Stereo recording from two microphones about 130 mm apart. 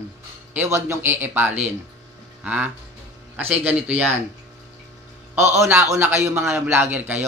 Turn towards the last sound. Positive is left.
turn(degrees=-15)  # may be behind; listen again after turning